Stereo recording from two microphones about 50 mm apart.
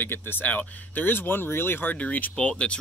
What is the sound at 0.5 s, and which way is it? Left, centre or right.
Speech, left.